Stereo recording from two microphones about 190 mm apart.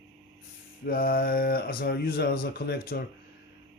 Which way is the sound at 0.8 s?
50° left (ahead or behind).